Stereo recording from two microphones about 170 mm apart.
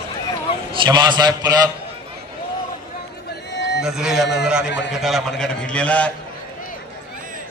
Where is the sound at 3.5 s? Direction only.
90° left.